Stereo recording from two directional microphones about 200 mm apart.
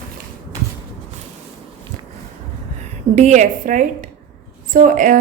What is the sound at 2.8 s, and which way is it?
A woman's voice, 35° right (ahead or behind).